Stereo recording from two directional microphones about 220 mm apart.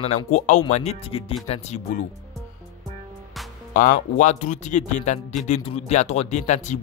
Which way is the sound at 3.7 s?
40° left (ahead or behind).